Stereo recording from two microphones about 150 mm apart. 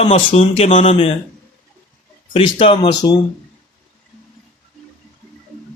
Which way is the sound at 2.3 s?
35° left (ahead or behind).